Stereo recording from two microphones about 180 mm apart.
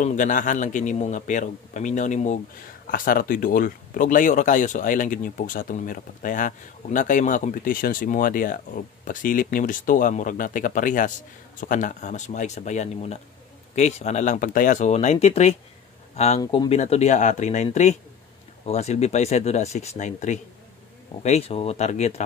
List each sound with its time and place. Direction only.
0.0 s speech: 45° left (ahead or behind)
2.9 s speech: 55° left (ahead or behind)
18.7 s speech: 35° left (ahead or behind)